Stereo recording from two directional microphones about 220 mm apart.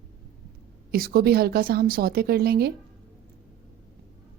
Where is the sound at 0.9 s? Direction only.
45° right (ahead or behind).